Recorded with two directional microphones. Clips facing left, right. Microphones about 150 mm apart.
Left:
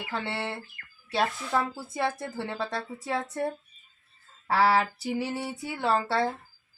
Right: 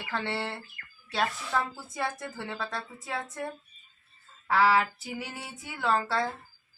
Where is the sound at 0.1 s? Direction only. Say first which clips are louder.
Right 1 dB; 15° left (ahead or behind).